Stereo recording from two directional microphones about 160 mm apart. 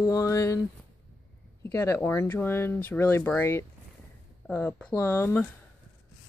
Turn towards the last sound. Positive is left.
turn(degrees=15)  # may be behind; listen again after turning